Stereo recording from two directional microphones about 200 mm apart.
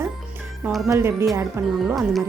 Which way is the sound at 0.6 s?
Centre (ahead or behind).